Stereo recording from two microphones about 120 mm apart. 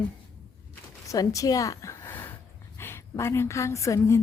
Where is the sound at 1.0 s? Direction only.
30° left (ahead or behind).